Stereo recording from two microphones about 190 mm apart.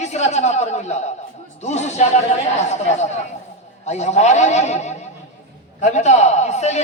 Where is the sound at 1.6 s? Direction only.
35° left (ahead or behind).